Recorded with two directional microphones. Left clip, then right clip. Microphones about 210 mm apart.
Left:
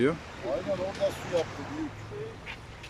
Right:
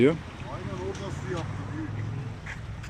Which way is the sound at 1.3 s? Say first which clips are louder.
Left 12 dB; 25° left (ahead or behind).